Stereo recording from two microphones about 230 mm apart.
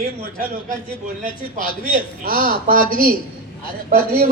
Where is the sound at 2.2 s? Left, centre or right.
Right.